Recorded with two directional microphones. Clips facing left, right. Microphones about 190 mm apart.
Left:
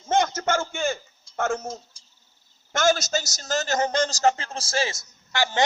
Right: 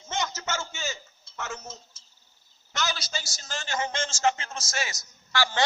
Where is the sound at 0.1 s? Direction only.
50° left (ahead or behind).